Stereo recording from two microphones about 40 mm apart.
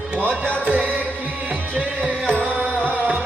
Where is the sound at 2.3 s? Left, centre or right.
Right.